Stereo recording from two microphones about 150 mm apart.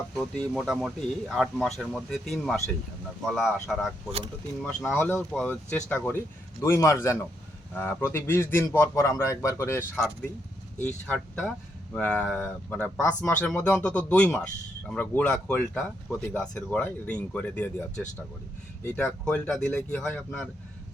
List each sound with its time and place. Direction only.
0.1 s speech: centre (ahead or behind)
4.6 s speech: 10° left (ahead or behind)